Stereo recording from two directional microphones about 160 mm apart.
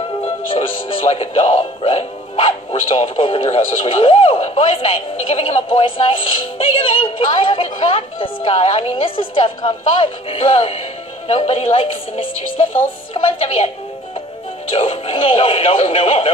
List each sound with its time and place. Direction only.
0.2 s speech: 35° left (ahead or behind)
14.7 s speech: 35° left (ahead or behind)